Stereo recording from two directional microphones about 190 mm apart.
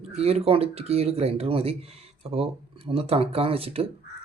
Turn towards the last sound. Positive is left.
turn(degrees=-30)  # may be behind; listen again after turning